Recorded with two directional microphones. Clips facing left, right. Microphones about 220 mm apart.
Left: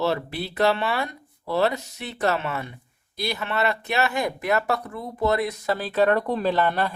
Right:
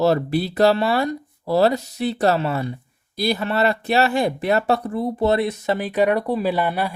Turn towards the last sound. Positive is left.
turn(degrees=-10)  # may be behind; listen again after turning